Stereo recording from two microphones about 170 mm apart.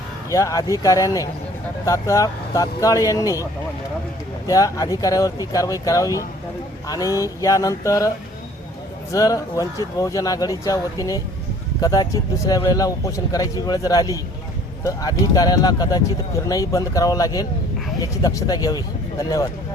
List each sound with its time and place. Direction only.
0.3 s a man's voice: 20° left (ahead or behind)
4.4 s a man's voice: 20° left (ahead or behind)
9.1 s a man's voice: 20° left (ahead or behind)